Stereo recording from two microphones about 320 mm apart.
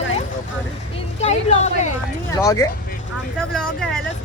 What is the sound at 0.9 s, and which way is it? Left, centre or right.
Speech, left.